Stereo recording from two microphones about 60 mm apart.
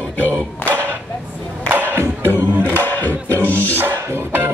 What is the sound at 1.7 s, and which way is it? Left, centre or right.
Music, right.